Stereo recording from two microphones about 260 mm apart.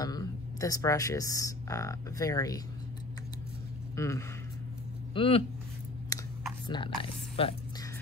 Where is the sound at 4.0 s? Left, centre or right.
Centre.